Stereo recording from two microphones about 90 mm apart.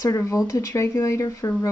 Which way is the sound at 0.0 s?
35° left (ahead or behind).